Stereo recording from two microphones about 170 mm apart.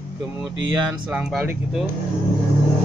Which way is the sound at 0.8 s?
5° right (ahead or behind).